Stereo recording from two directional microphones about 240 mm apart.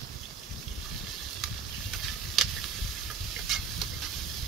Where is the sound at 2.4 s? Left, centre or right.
Centre.